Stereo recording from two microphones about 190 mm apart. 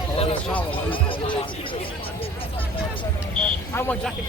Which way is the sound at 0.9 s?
25° left (ahead or behind).